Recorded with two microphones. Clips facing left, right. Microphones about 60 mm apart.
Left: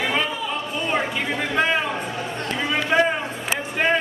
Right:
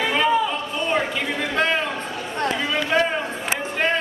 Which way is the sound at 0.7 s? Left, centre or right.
Centre.